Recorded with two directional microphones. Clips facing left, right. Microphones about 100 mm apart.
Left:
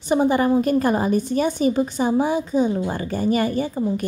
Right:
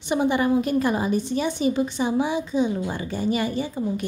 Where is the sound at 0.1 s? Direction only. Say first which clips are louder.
Left 3 dB; 40° left (ahead or behind).